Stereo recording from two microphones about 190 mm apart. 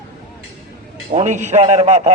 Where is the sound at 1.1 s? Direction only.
40° right (ahead or behind).